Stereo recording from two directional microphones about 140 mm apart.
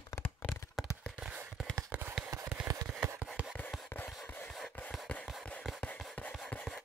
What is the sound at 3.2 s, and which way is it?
Rub, 5° right (ahead or behind).